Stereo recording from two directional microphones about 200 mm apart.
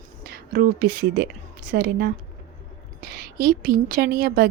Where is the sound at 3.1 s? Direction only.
45° right (ahead or behind).